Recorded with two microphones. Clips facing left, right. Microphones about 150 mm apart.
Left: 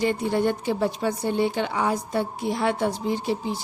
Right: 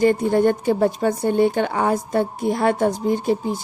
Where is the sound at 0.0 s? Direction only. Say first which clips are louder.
Right 6 dB; 50° right (ahead or behind).